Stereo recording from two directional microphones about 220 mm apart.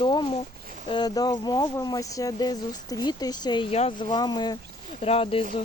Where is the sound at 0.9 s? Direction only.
20° left (ahead or behind).